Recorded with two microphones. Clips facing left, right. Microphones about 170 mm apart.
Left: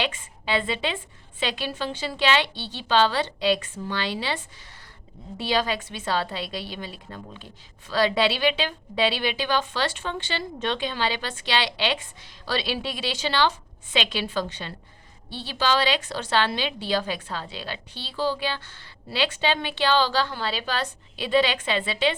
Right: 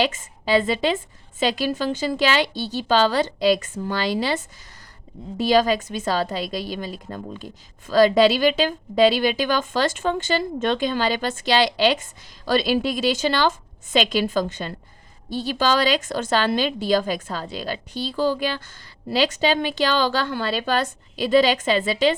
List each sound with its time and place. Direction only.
0.0 s a woman's voice: 40° right (ahead or behind)